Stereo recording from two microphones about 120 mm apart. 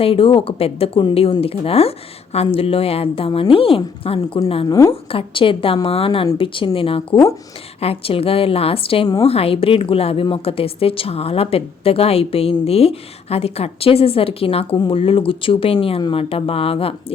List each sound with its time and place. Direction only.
0.0 s a woman's voice: 50° left (ahead or behind)